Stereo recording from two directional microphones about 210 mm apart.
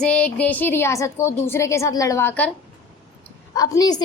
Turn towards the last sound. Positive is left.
turn(degrees=15)  # may be behind; listen again after turning